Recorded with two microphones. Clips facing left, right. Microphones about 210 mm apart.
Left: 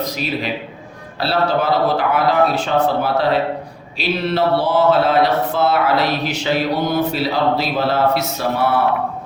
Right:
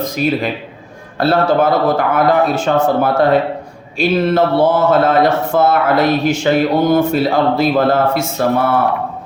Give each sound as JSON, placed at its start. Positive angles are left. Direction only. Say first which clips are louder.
{"t": 0.0, "sound": "speech", "louder": "right 6 dB", "side_deg": -50}